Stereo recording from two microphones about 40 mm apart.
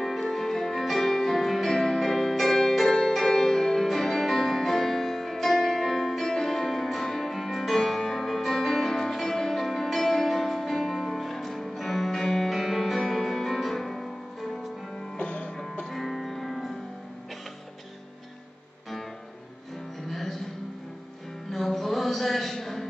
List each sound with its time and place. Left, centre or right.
0.0 s music: centre
15.1 s music: left
15.9 s music: centre
20.1 s music: centre
21.5 s a sound: centre